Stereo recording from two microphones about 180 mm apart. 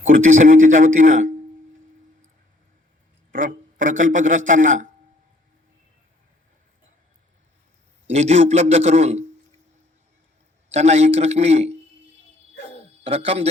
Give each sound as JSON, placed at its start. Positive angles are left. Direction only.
{"t": 0.0, "sound": "speech", "side_deg": -40}
{"t": 3.3, "sound": "speech", "side_deg": -45}
{"t": 8.1, "sound": "a man's voice", "side_deg": -40}
{"t": 10.7, "sound": "a man's voice", "side_deg": -40}
{"t": 13.1, "sound": "a man's voice", "side_deg": -35}